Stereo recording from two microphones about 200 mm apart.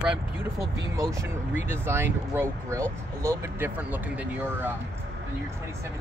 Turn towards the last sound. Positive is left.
turn(degrees=-10)  # may be behind; listen again after turning